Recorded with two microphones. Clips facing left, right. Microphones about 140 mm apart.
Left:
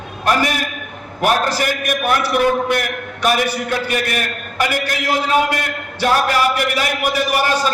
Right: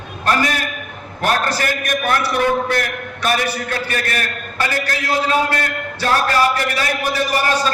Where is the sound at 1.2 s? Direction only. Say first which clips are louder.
Left 2 dB; 10° left (ahead or behind).